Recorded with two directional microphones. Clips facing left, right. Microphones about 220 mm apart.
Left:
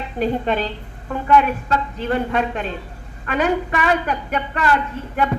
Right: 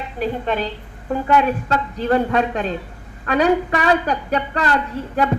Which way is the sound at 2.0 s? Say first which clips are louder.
Right 5 dB; 40° right (ahead or behind).